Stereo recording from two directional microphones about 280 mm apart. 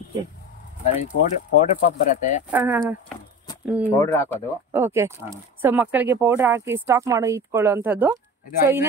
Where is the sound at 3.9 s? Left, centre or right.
Centre.